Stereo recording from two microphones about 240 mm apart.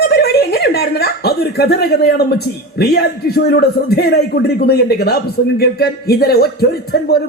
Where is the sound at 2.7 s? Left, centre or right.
Left.